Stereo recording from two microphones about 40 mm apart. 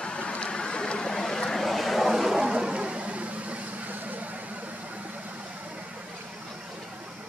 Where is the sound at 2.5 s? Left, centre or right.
Right.